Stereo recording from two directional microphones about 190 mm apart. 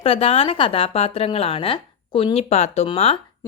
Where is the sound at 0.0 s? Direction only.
30° left (ahead or behind).